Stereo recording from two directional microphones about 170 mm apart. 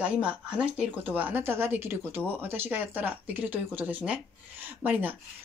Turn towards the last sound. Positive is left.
turn(degrees=-10)  # may be behind; listen again after turning